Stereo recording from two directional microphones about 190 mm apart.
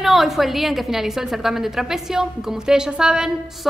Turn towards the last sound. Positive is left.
turn(degrees=-5)  # may be behind; listen again after turning